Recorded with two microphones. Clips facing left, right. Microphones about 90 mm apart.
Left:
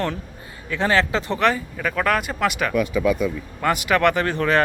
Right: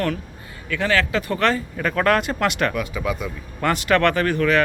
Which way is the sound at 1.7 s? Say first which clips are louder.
Right 2 dB; centre (ahead or behind).